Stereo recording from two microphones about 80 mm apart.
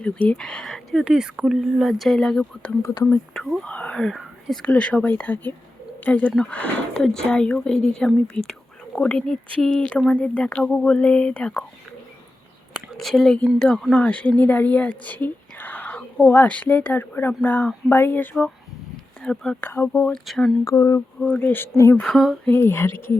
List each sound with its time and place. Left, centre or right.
0.0 s speech: centre
1.0 s speech: centre
3.6 s speech: centre
4.1 s whispering: centre
4.6 s speech: centre
13.0 s speech: centre; by 18.4 s left
19.2 s speech: centre
19.6 s speech: left
20.1 s speech: centre
20.7 s speech: left
21.2 s speech: centre
22.0 s speech: centre
22.4 s speech: left